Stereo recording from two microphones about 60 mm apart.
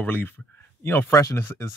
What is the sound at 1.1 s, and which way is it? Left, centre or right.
Speech, left.